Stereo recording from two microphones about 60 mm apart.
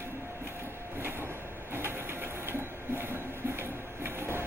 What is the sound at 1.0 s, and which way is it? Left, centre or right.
Printer, right.